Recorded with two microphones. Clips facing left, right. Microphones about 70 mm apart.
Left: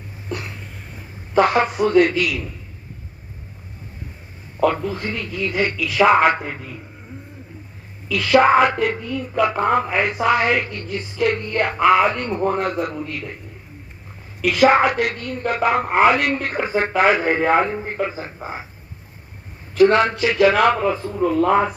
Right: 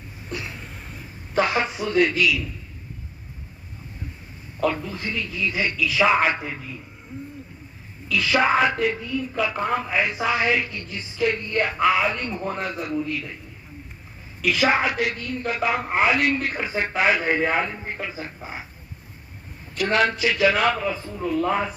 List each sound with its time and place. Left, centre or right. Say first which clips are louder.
1.4 s speech: left 6 dB; left
4.6 s speech: left 5 dB; left
8.1 s speech: left 6 dB; left
14.4 s speech: left 6 dB; left
19.8 s speech: left 6 dB; left